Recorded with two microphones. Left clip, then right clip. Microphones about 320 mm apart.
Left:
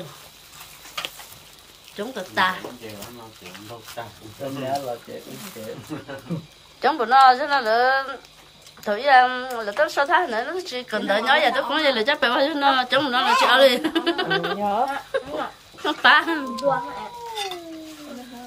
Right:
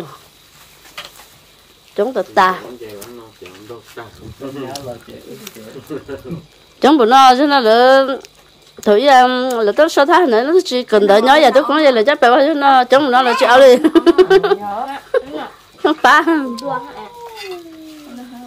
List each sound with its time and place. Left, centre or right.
2.0 s a woman's voice: centre
6.8 s a man's voice: right
15.1 s a sound: centre
15.8 s a woman's voice: centre